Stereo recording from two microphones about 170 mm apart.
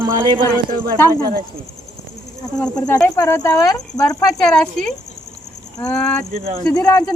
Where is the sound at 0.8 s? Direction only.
60° right (ahead or behind).